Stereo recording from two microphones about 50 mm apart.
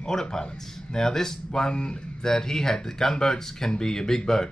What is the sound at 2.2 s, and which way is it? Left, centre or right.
Speech, centre.